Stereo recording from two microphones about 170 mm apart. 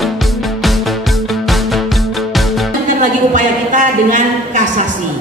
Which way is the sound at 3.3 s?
50° right (ahead or behind).